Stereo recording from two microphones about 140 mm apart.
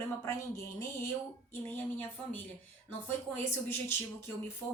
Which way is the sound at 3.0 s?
15° left (ahead or behind).